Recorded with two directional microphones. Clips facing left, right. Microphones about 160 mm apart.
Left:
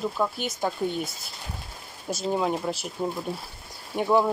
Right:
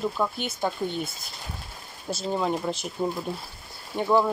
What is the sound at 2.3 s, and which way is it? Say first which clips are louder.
Speech: left 1 dB; 5° left (ahead or behind).